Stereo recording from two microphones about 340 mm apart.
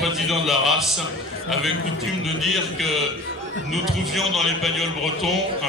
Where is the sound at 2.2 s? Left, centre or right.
Centre.